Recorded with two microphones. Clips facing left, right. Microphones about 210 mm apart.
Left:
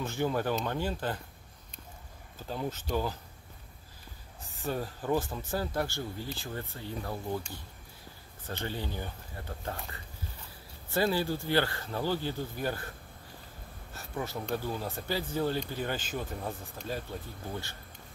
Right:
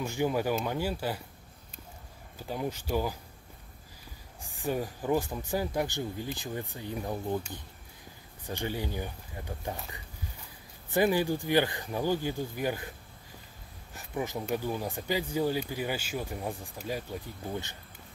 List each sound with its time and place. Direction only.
0.0 s speech: 10° right (ahead or behind)
2.3 s speech: 10° right (ahead or behind)
4.4 s speech: 15° right (ahead or behind)
8.5 s speech: 15° right (ahead or behind)
10.9 s speech: 15° right (ahead or behind)
13.9 s speech: 15° right (ahead or behind)